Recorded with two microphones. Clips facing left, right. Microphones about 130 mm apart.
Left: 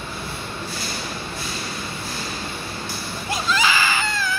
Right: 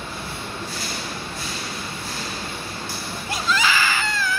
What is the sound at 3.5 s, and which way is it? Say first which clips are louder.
Baby cry: even; 20° left (ahead or behind).